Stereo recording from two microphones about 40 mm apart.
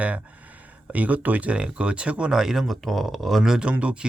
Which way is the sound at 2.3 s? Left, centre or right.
Centre.